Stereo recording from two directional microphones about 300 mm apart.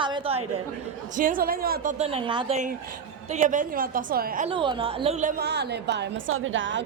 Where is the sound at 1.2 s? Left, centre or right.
Right.